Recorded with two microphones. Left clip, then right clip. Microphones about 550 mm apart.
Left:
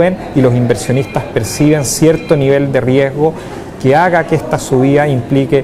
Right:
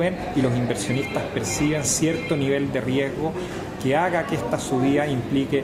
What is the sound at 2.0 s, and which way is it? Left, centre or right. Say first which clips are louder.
Speech: left 13 dB; left.